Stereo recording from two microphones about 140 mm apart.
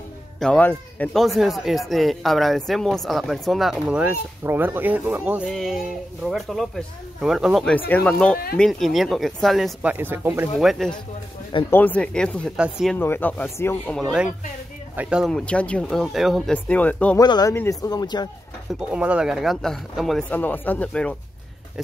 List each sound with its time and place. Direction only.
0.4 s speech: 10° left (ahead or behind); by 5.5 s 10° right (ahead or behind)
5.5 s speech: centre (ahead or behind)
7.9 s speech: 10° left (ahead or behind)
9.8 s speech: 15° right (ahead or behind)
10.6 s speech: centre (ahead or behind)
11.7 s speech: 10° left (ahead or behind)
12.5 s speech: 5° right (ahead or behind)
12.9 s speech: 15° left (ahead or behind)
13.9 s speech: 5° right (ahead or behind)
15.2 s speech: 5° left (ahead or behind)
16.5 s speech: 10° left (ahead or behind)
17.2 s speech: 30° left (ahead or behind)
18.7 s speech: 10° right (ahead or behind)
20.2 s speech: 10° left (ahead or behind)